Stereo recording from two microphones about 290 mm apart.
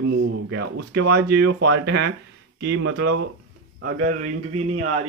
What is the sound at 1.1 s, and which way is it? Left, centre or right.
A man's voice, right.